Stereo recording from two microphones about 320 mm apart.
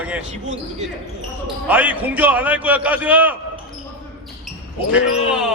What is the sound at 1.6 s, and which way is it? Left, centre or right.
A man's voice, centre.